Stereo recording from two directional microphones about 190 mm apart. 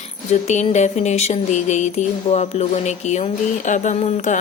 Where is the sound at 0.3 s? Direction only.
35° left (ahead or behind).